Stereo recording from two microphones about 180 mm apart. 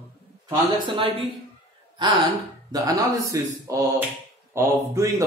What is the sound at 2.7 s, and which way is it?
A man's voice, 20° right (ahead or behind).